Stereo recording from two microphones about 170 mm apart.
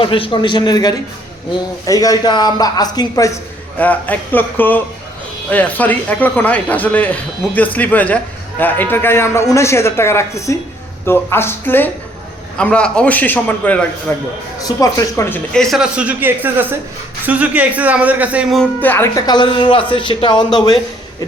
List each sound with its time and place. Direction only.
0.0 s speech: 30° left (ahead or behind)
3.8 s speech: 10° left (ahead or behind)
15.5 s speech: centre (ahead or behind)
18.6 s speech: 10° left (ahead or behind); by 20.6 s 25° left (ahead or behind)